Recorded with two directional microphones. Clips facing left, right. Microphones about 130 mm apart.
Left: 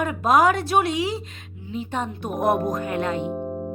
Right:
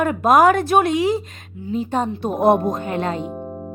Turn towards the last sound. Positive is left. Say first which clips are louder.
# left 2 dB
turn(degrees=-5)  # may be behind; listen again after turning